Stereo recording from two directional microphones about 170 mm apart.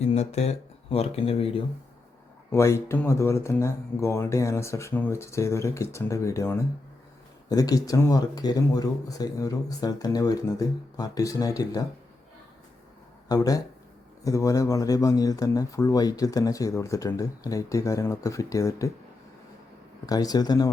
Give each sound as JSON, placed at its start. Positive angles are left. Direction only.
{"t": 0.0, "sound": "speech", "side_deg": 40}
{"t": 2.5, "sound": "speech", "side_deg": 15}
{"t": 13.2, "sound": "speech", "side_deg": 20}
{"t": 20.1, "sound": "speech", "side_deg": 20}